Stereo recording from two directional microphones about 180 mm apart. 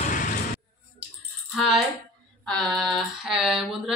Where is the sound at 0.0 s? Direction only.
50° left (ahead or behind).